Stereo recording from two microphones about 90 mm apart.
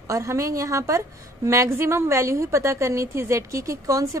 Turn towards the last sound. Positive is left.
turn(degrees=-40)  # may be behind; listen again after turning